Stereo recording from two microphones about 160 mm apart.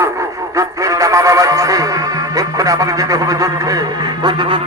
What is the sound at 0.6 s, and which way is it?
Music, 20° right (ahead or behind).